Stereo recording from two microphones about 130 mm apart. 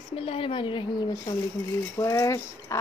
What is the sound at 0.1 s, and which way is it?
Speech, 45° left (ahead or behind).